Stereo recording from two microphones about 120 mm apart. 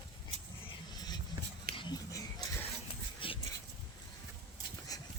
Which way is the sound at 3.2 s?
45° left (ahead or behind).